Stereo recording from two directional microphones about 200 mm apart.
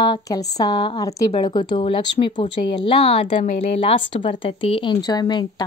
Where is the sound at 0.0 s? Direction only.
20° left (ahead or behind).